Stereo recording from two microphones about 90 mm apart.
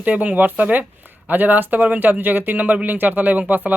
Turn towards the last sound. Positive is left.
turn(degrees=-20)  # may be behind; listen again after turning